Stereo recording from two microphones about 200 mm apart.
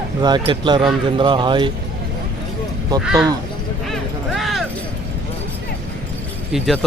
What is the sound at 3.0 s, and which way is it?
Speech, 5° right (ahead or behind).